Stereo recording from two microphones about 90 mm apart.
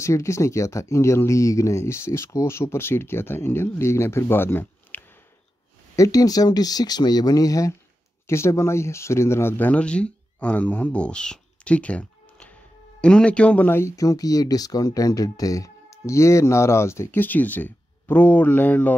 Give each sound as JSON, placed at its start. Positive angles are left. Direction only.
{"t": 0.0, "sound": "speech", "side_deg": 35}
{"t": 5.9, "sound": "a man's voice", "side_deg": 40}
{"t": 13.7, "sound": "speech", "side_deg": 30}